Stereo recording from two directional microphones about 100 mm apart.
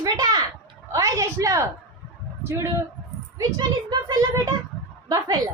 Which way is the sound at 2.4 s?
25° right (ahead or behind).